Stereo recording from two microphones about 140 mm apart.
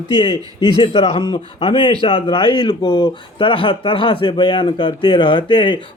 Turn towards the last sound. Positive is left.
turn(degrees=35)  # may be behind; listen again after turning